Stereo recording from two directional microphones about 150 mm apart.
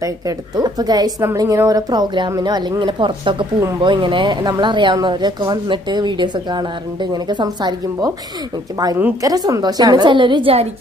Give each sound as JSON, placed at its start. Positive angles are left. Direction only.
{"t": 0.6, "sound": "speech", "side_deg": -25}
{"t": 8.9, "sound": "speech", "side_deg": -15}
{"t": 9.3, "sound": "speech", "side_deg": -25}